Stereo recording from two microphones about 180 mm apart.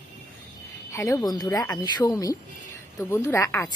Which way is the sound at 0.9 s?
20° left (ahead or behind).